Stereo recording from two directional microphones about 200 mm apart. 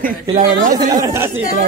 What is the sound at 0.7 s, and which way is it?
Speech, 15° right (ahead or behind).